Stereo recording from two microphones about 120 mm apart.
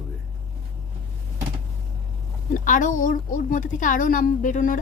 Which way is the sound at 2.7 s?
90° left.